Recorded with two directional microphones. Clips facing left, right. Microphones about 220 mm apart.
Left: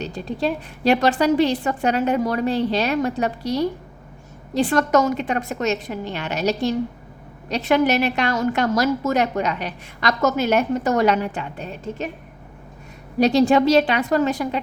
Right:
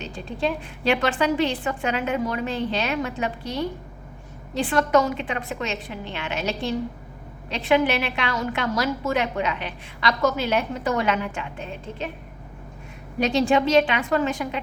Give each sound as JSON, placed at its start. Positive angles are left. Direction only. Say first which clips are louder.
{"t": 0.0, "sound": "a woman's voice", "louder": "left 3 dB", "side_deg": 40}
{"t": 13.1, "sound": "a woman's voice", "louder": "left 5 dB", "side_deg": 35}